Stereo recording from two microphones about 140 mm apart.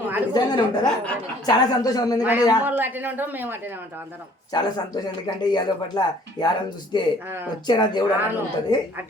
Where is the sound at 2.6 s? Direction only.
15° right (ahead or behind).